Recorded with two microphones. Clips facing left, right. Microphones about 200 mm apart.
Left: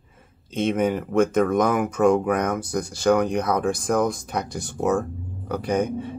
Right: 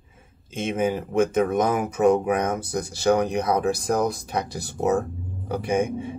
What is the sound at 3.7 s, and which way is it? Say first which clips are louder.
Speech: left 1 dB; 35° right (ahead or behind).